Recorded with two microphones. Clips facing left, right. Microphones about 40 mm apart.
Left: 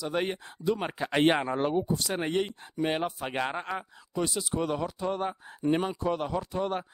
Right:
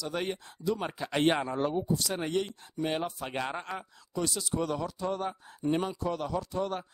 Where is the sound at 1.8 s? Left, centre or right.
Left.